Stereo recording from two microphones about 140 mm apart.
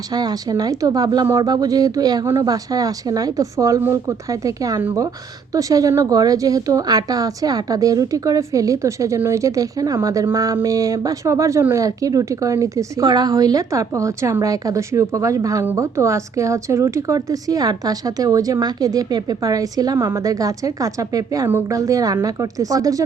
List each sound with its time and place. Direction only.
0.1 s a woman's voice: 30° right (ahead or behind)